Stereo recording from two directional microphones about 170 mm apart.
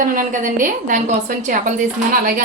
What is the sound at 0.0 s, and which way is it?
A woman's voice, 55° right (ahead or behind).